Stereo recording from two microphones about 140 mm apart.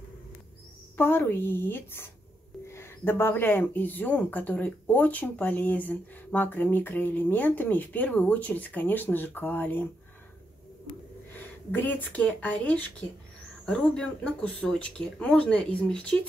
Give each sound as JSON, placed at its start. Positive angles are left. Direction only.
{"t": 0.9, "sound": "speech", "side_deg": 15}
{"t": 11.3, "sound": "speech", "side_deg": 15}